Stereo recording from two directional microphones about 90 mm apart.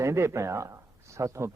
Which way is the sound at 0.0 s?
35° right (ahead or behind).